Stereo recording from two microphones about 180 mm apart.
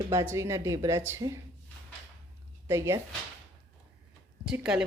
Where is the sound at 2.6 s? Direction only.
15° right (ahead or behind).